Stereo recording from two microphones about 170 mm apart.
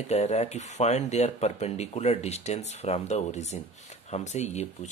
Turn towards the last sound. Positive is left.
turn(degrees=40)  # may be behind; listen again after turning